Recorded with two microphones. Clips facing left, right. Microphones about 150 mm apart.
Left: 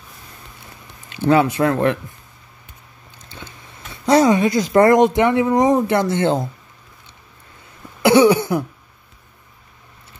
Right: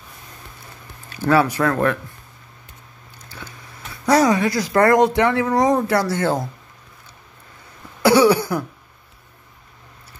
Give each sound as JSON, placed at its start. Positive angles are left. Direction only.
{"t": 1.1, "sound": "speech", "side_deg": 20}
{"t": 3.3, "sound": "speech", "side_deg": 25}
{"t": 8.0, "sound": "cough", "side_deg": 20}